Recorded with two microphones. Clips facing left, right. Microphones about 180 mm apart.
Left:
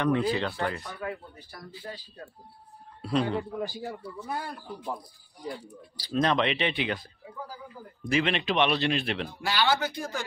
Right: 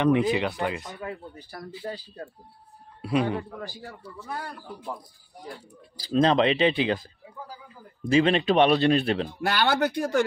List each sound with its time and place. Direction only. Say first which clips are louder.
0.0 s speech: right 4 dB; 20° right (ahead or behind)
1.5 s speech: right 6 dB; 35° right (ahead or behind)
3.0 s a man's voice: right 2 dB; 10° right (ahead or behind)
3.5 s speech: left 5 dB; 20° left (ahead or behind)
6.1 s speech: right 5 dB; 30° right (ahead or behind)
8.0 s speech: right 6 dB; 35° right (ahead or behind)
9.4 s speech: right 1 dB; 55° right (ahead or behind)